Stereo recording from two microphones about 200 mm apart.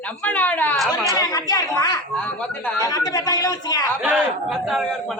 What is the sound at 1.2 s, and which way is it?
Speech, 20° left (ahead or behind).